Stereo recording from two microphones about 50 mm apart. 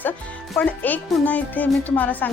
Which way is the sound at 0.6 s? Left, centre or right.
Left.